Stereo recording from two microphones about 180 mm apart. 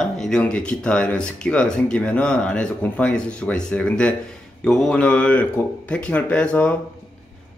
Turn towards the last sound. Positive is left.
turn(degrees=5)  # may be behind; listen again after turning